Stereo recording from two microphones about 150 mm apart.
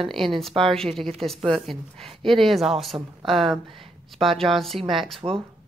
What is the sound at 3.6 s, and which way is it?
Speech, 35° right (ahead or behind).